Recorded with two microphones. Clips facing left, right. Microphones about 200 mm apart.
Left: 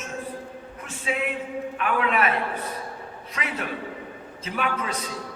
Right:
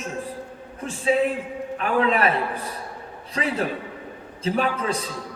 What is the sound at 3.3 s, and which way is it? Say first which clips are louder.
A man's voice: right 6 dB; 35° right (ahead or behind).